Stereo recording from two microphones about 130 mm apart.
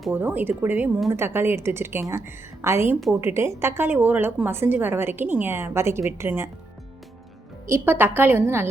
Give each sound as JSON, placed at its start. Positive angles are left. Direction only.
{"t": 0.1, "sound": "a woman's voice", "side_deg": -15}
{"t": 7.7, "sound": "a woman's voice", "side_deg": -15}